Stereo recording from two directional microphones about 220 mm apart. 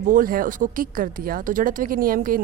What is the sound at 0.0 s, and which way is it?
Speech, 40° right (ahead or behind).